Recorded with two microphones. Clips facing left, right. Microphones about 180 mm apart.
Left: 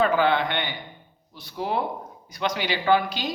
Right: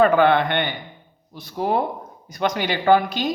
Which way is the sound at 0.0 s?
55° right (ahead or behind).